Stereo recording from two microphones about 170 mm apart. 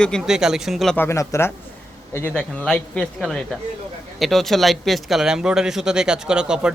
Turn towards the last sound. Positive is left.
turn(degrees=-5)  # may be behind; listen again after turning